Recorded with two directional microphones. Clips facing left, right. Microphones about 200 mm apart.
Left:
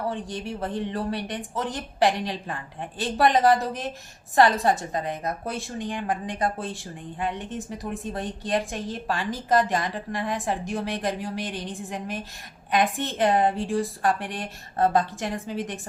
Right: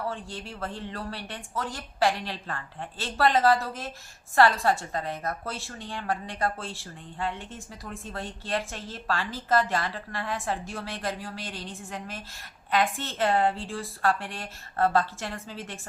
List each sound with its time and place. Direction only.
0.0 s a woman's voice: 20° left (ahead or behind)